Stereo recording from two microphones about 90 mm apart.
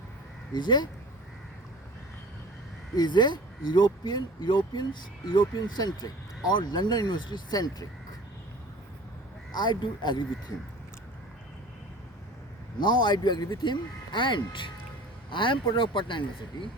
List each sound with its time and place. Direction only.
0.5 s speech: 55° left (ahead or behind)
2.9 s speech: 50° left (ahead or behind)
9.6 s speech: 55° left (ahead or behind)
12.8 s speech: 55° left (ahead or behind)